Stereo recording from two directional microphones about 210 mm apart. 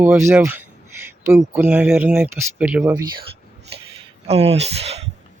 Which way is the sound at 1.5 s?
10° right (ahead or behind).